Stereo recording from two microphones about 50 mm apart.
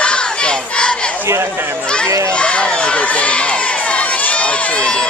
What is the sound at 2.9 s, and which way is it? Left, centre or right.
Crowd, left.